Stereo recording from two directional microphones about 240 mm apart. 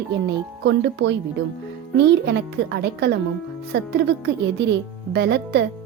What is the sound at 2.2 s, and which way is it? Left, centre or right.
Speech, right.